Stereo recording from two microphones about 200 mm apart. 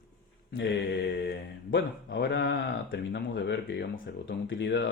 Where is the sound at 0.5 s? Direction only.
65° left (ahead or behind).